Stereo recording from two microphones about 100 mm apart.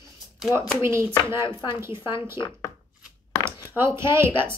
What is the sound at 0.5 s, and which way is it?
Speech, 25° right (ahead or behind).